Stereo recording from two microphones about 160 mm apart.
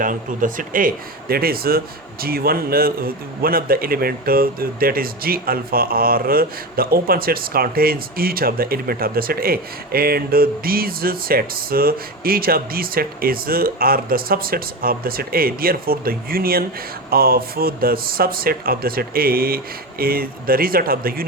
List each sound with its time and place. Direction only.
0.0 s speech: 55° right (ahead or behind)